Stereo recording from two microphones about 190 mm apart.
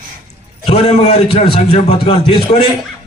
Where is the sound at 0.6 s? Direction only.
35° left (ahead or behind).